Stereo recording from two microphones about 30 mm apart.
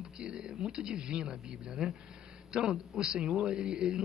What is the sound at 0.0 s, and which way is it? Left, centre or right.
A man's voice, right.